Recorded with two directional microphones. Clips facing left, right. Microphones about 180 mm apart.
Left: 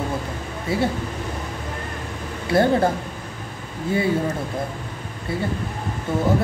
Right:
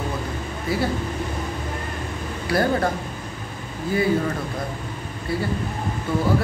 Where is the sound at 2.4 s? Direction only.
25° left (ahead or behind).